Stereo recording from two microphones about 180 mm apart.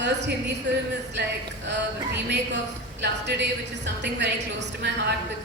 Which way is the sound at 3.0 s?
75° right (ahead or behind).